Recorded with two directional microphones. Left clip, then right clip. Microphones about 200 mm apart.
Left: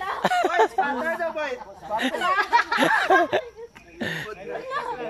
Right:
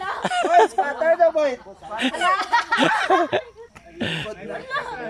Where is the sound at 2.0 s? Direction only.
5° right (ahead or behind).